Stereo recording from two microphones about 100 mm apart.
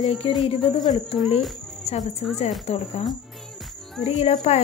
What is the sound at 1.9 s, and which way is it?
Speech, 90° left.